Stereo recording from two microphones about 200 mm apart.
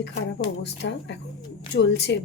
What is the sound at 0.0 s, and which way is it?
Speech, 60° left (ahead or behind).